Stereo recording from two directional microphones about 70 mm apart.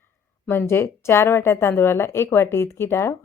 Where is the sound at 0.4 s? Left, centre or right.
Left.